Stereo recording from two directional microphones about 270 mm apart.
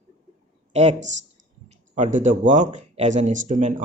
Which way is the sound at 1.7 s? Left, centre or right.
Right.